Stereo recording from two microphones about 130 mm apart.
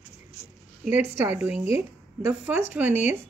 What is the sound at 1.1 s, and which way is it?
A woman's voice, 15° right (ahead or behind).